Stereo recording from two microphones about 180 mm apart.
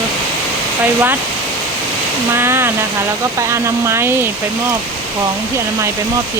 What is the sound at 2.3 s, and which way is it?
Speech, 15° right (ahead or behind).